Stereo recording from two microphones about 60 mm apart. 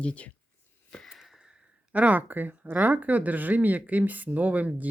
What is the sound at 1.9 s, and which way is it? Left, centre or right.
Speech, right.